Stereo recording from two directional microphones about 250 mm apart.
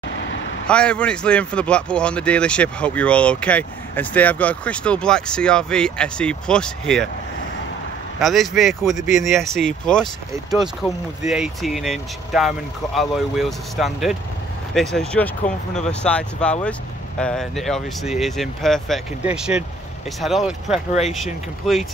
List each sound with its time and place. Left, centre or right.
0.7 s speech: centre
8.2 s speech: centre
15.4 s speech: left
15.9 s speech: centre